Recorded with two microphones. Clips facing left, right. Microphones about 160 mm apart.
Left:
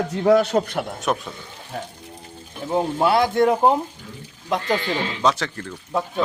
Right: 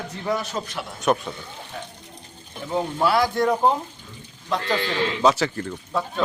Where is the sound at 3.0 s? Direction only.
25° left (ahead or behind).